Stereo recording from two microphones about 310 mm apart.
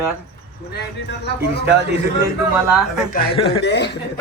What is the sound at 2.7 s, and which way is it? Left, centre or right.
Speech, centre.